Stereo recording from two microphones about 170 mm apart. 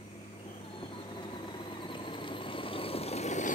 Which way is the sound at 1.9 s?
30° left (ahead or behind).